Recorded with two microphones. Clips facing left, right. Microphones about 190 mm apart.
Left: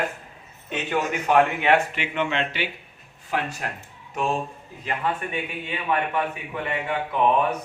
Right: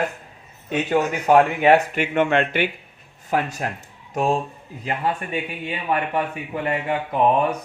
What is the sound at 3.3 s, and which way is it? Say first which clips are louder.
Speech: right 5 dB; 40° right (ahead or behind).